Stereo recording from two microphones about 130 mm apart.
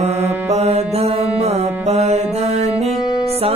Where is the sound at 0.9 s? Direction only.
50° right (ahead or behind).